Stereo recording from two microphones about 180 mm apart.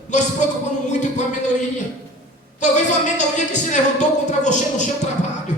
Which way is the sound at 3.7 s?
40° left (ahead or behind).